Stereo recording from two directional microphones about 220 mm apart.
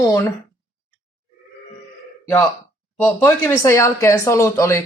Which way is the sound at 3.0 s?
10° left (ahead or behind).